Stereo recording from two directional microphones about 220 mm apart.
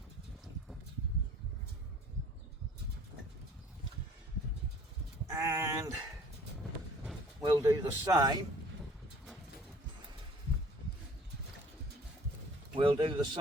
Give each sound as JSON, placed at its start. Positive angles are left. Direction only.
{"t": 5.3, "sound": "speech", "side_deg": -15}
{"t": 7.5, "sound": "speech", "side_deg": -15}
{"t": 12.7, "sound": "speech", "side_deg": -20}